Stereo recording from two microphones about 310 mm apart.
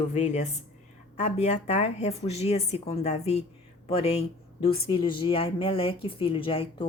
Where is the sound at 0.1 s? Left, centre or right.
Left.